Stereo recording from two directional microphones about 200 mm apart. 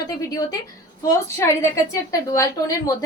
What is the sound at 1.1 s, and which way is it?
A woman's voice, 15° left (ahead or behind).